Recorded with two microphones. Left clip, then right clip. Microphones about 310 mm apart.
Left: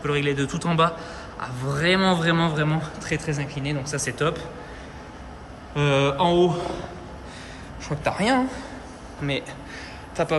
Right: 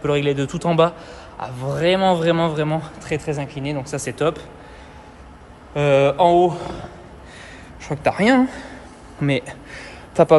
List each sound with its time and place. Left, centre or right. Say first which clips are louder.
0.0 s a man's voice: right 4 dB; centre
5.8 s a man's voice: right 6 dB; centre
9.2 s a sound: right 6 dB; centre